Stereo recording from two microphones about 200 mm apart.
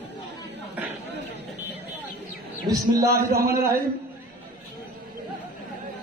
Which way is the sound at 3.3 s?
50° right (ahead or behind).